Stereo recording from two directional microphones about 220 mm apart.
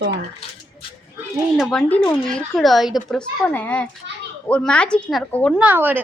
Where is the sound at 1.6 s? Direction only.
Centre (ahead or behind).